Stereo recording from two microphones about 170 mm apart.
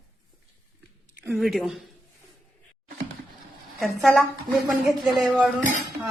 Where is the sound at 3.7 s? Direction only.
Centre (ahead or behind).